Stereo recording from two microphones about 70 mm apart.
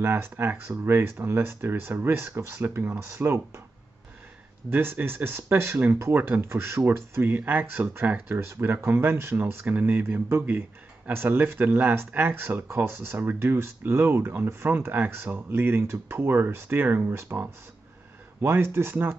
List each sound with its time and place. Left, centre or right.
0.0 s speech: right
4.6 s speech: right